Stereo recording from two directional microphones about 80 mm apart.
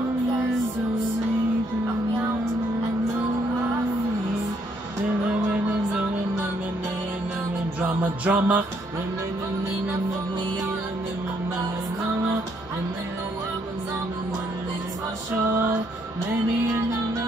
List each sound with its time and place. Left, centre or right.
8.0 s music: right